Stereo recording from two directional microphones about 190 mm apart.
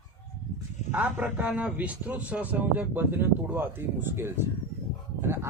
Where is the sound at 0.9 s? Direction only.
10° right (ahead or behind).